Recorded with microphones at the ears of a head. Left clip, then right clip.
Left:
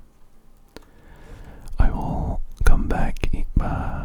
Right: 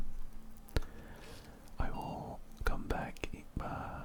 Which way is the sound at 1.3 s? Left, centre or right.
Left.